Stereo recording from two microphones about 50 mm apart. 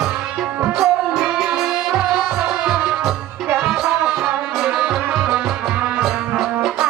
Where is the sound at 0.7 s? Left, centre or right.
Centre.